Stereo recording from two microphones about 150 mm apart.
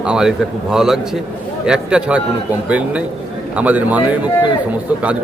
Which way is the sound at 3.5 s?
10° right (ahead or behind).